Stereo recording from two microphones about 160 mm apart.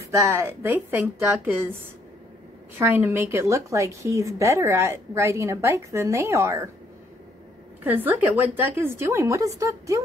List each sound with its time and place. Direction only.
0.1 s a woman's voice: 20° right (ahead or behind)
2.8 s a woman's voice: 15° right (ahead or behind)
7.8 s a woman's voice: 10° right (ahead or behind)